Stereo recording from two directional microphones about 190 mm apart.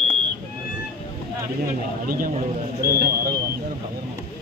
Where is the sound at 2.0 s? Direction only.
50° right (ahead or behind).